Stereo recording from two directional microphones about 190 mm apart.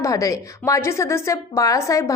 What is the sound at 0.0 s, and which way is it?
A woman's voice, 15° left (ahead or behind).